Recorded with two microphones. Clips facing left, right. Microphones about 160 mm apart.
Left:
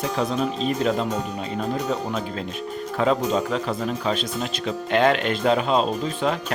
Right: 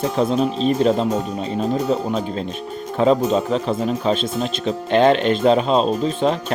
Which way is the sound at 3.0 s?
25° right (ahead or behind).